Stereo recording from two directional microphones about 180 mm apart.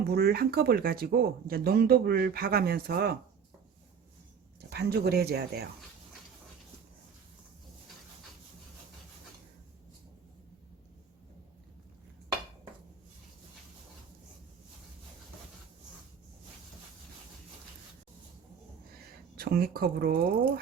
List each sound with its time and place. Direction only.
0.0 s speech: 60° right (ahead or behind)
4.7 s speech: 60° right (ahead or behind)
19.4 s speech: 55° right (ahead or behind)